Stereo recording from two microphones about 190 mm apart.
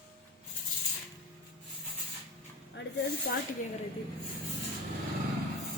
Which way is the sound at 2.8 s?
70° left (ahead or behind).